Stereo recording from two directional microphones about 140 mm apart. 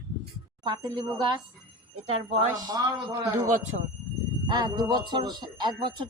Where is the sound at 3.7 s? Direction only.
70° right (ahead or behind).